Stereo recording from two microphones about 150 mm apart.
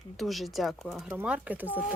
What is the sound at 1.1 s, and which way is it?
Speech, 10° right (ahead or behind).